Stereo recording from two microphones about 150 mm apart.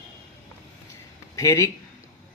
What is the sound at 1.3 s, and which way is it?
Speech, 20° left (ahead or behind).